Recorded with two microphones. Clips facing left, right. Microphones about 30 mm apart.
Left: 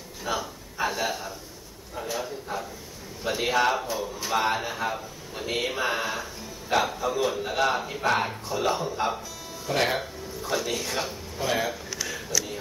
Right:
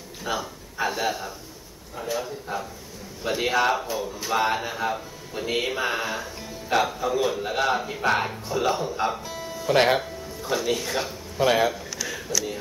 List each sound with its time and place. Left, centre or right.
0.2 s a man's voice: centre
9.3 s music: right
9.9 s speech: centre
11.3 s speech: right